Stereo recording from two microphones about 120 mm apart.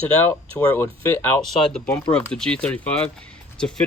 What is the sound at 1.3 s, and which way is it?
Speech, 5° left (ahead or behind).